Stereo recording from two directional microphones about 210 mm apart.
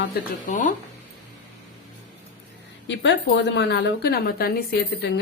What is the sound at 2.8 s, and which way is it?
A woman's voice, 60° left (ahead or behind).